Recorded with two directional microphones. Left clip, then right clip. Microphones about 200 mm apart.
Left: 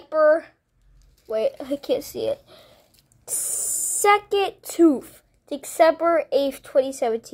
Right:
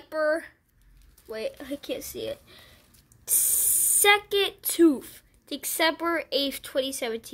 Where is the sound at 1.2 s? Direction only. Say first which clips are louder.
Left 10 dB; 10° right (ahead or behind).